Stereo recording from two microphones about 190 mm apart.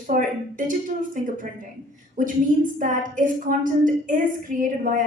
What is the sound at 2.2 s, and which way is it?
A woman's voice, 45° right (ahead or behind).